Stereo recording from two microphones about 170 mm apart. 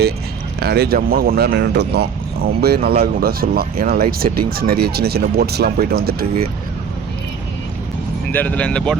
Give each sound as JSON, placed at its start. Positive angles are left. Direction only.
{"t": 0.6, "sound": "speech", "side_deg": -70}
{"t": 8.3, "sound": "speech", "side_deg": 10}